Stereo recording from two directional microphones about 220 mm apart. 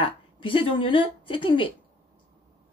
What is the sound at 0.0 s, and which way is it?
Speech, 25° left (ahead or behind).